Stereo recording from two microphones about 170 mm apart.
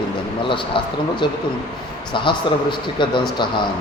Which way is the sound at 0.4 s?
30° left (ahead or behind).